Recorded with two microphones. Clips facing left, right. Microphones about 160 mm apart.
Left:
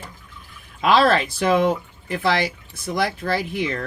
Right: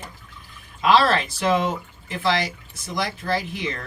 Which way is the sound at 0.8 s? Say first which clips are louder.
Left 1 dB; 55° left (ahead or behind).